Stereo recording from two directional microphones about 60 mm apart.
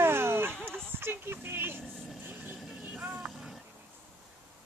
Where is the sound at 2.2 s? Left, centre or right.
Right.